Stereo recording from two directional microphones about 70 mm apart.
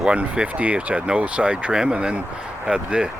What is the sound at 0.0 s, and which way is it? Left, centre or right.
Speech, centre.